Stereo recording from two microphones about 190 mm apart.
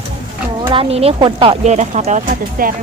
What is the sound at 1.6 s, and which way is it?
Speech, 35° right (ahead or behind).